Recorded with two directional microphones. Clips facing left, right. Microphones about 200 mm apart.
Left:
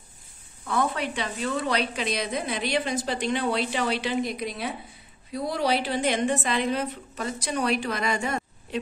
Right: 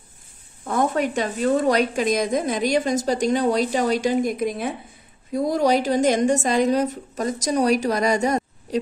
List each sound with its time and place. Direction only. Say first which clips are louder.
0.7 s a woman's voice: right 5 dB; 45° right (ahead or behind)